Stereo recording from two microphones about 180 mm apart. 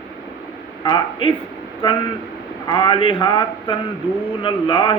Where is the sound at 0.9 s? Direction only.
25° left (ahead or behind).